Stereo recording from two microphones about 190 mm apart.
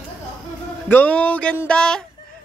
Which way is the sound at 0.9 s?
5° left (ahead or behind).